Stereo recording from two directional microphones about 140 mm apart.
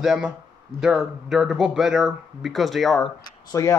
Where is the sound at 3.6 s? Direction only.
20° left (ahead or behind).